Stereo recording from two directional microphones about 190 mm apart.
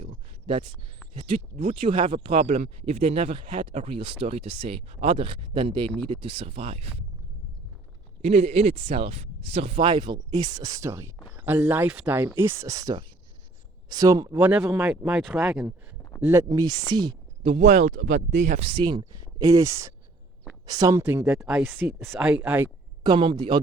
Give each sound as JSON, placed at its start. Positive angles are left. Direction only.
{"t": 0.0, "sound": "a sound", "side_deg": -30}
{"t": 1.2, "sound": "speech", "side_deg": -35}
{"t": 8.2, "sound": "speech", "side_deg": -35}
{"t": 14.3, "sound": "speech", "side_deg": -10}
{"t": 17.4, "sound": "speech", "side_deg": -35}
{"t": 21.0, "sound": "speech", "side_deg": -10}
{"t": 23.0, "sound": "speech", "side_deg": -25}